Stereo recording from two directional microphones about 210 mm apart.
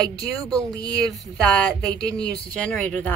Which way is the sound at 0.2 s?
15° right (ahead or behind).